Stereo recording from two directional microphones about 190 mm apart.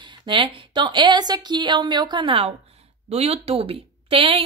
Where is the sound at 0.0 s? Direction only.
25° right (ahead or behind).